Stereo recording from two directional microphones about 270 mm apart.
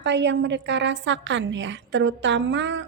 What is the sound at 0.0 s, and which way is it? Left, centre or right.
A woman's voice, right.